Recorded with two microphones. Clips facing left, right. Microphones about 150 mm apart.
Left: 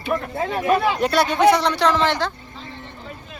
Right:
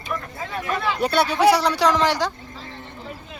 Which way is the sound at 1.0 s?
Centre (ahead or behind).